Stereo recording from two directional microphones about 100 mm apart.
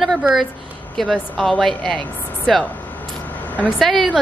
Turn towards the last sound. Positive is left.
turn(degrees=0)  # may be behind; listen again after turning